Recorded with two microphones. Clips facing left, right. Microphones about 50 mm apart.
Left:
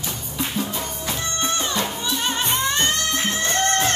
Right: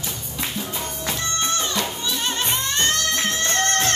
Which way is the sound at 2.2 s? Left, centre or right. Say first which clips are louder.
Left 3 dB; centre.